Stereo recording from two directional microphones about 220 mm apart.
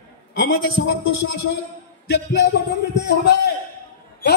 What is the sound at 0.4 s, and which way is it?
Speech, 60° left (ahead or behind).